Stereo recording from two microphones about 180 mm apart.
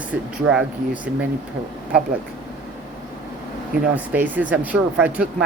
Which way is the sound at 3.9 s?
10° right (ahead or behind).